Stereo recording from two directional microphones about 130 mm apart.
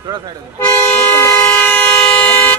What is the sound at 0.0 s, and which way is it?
Speech, 35° right (ahead or behind).